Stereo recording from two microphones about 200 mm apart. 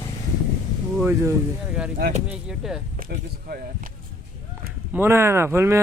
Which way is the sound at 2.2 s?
5° right (ahead or behind).